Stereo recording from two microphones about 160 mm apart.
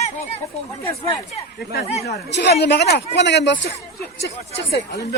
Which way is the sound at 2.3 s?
90° left.